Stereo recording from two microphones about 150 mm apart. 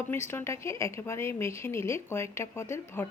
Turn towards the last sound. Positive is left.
turn(degrees=15)  # may be behind; listen again after turning